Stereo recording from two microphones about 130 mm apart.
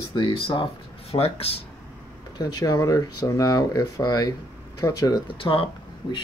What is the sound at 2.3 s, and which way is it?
Speech, 30° left (ahead or behind).